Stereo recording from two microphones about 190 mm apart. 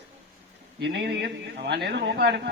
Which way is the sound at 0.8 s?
65° right (ahead or behind).